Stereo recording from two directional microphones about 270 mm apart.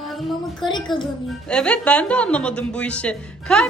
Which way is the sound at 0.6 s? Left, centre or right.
Centre.